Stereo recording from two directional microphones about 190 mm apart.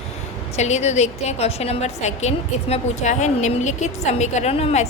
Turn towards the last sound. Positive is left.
turn(degrees=35)  # may be behind; listen again after turning